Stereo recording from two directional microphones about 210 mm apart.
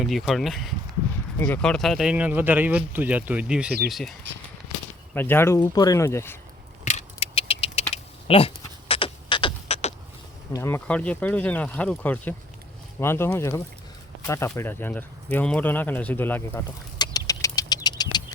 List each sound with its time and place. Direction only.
0.0 s speech: centre (ahead or behind)
5.1 s speech: 10° left (ahead or behind)
6.8 s a sound: 30° left (ahead or behind)
10.5 s speech: 10° left (ahead or behind)